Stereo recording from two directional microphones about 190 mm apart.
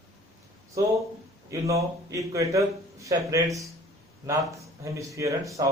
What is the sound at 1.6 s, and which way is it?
A man's voice, 15° right (ahead or behind).